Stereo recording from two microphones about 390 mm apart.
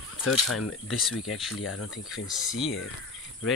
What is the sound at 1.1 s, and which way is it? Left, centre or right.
Speech, left.